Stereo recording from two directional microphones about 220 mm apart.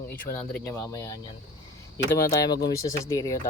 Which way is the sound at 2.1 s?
15° left (ahead or behind).